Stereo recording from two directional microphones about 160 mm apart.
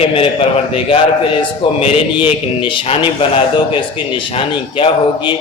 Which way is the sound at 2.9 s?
35° left (ahead or behind).